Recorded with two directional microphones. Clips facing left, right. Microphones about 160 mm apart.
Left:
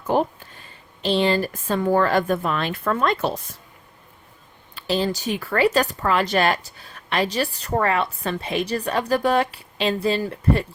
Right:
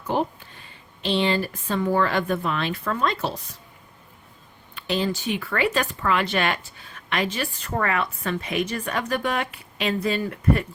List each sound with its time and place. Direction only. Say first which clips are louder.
0.1 s speech: left 4 dB; 45° left (ahead or behind)
4.7 s a woman's voice: left 2 dB; 35° left (ahead or behind)